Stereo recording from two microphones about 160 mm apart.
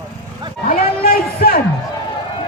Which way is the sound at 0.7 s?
70° left (ahead or behind).